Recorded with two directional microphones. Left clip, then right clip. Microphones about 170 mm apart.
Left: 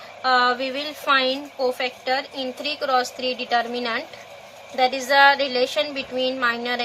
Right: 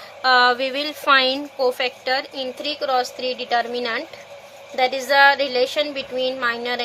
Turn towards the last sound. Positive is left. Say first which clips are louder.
# even
turn(degrees=-30)  # may be behind; listen again after turning